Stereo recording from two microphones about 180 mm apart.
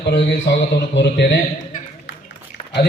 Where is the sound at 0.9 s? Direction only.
75° left (ahead or behind).